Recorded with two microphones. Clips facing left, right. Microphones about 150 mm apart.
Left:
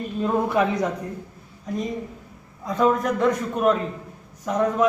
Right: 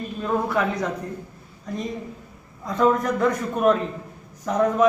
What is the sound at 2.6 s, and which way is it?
A man's voice, centre (ahead or behind).